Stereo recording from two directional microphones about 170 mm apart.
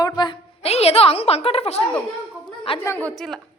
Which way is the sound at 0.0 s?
25° left (ahead or behind).